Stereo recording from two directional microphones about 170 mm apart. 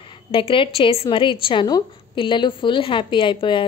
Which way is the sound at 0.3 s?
30° left (ahead or behind).